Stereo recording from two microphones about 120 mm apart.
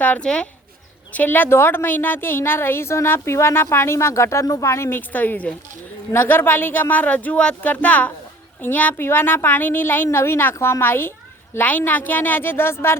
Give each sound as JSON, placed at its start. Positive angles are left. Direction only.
{"t": 0.0, "sound": "a woman's voice", "side_deg": 10}